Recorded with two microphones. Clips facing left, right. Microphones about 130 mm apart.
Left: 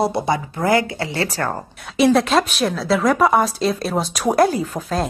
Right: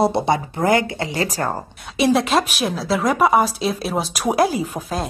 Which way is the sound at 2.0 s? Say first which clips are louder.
Left 2 dB; centre (ahead or behind).